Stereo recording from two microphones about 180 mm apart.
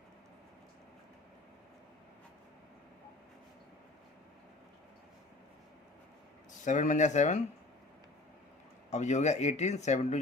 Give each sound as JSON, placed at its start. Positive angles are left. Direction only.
{"t": 6.7, "sound": "speech", "side_deg": 45}
{"t": 8.9, "sound": "speech", "side_deg": 40}